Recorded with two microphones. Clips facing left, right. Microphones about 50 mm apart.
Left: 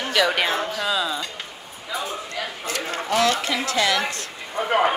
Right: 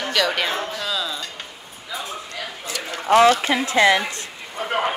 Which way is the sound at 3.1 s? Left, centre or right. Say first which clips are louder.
Right 7 dB; right.